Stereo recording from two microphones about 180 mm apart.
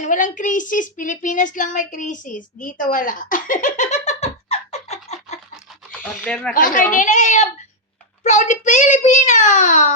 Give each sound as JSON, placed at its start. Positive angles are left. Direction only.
{"t": 0.0, "sound": "speech", "side_deg": 45}
{"t": 5.9, "sound": "speech", "side_deg": 5}
{"t": 6.5, "sound": "a child's voice", "side_deg": 50}